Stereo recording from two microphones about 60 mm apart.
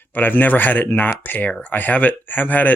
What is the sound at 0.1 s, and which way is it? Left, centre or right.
Speech, left.